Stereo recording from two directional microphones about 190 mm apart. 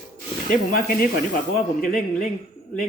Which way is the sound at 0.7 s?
50° left (ahead or behind).